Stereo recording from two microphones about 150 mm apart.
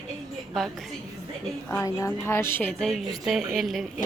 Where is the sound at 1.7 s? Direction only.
20° left (ahead or behind); by 3.9 s centre (ahead or behind).